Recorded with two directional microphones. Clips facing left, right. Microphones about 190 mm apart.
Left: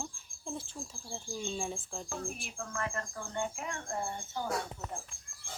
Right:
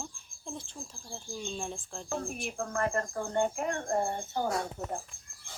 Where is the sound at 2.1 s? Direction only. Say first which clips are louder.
Right 7 dB; 45° right (ahead or behind).